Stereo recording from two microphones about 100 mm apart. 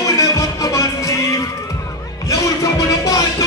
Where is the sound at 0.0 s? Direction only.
35° left (ahead or behind).